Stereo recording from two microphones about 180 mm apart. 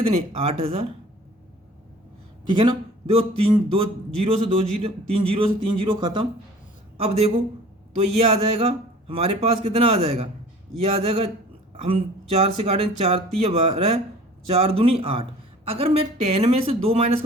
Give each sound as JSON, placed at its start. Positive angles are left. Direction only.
{"t": 0.0, "sound": "speech", "side_deg": -30}
{"t": 2.5, "sound": "a man's voice", "side_deg": -30}